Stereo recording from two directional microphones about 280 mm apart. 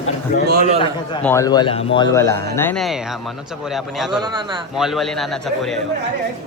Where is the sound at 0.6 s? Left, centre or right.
Centre.